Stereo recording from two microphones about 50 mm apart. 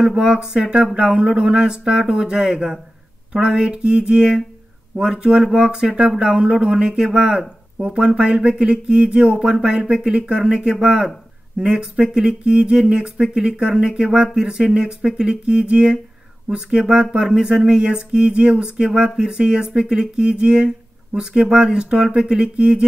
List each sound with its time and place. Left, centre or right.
0.0 s speech: centre